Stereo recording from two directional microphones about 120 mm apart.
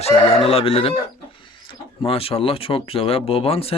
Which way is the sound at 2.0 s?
50° left (ahead or behind).